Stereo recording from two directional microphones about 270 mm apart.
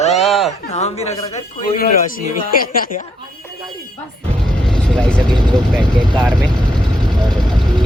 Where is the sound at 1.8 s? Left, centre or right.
Left.